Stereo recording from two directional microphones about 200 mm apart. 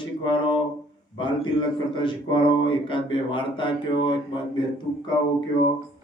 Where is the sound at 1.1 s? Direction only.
25° left (ahead or behind).